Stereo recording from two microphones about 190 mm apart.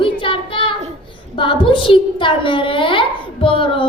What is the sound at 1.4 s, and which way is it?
A child's voice, 25° left (ahead or behind).